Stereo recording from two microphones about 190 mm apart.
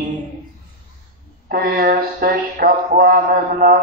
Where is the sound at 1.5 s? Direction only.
50° right (ahead or behind).